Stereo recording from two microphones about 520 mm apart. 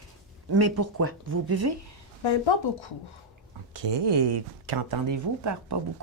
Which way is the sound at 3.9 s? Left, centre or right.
Right.